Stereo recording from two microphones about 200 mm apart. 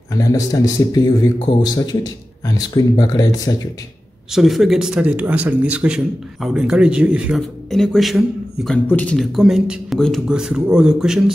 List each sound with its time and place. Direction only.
0.2 s speech: 15° left (ahead or behind)
4.3 s speech: centre (ahead or behind)